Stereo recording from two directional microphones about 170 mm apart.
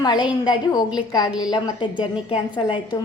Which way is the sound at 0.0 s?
25° left (ahead or behind).